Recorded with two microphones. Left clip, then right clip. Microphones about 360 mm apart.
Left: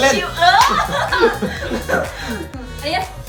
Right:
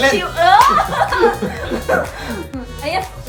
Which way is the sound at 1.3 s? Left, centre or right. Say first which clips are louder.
Right 1 dB; centre.